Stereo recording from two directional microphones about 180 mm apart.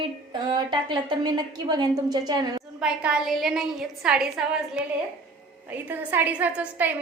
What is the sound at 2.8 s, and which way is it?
A woman's voice, 5° right (ahead or behind).